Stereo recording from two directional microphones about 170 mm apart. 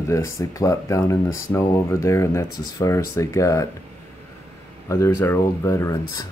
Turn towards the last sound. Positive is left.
turn(degrees=15)  # may be behind; listen again after turning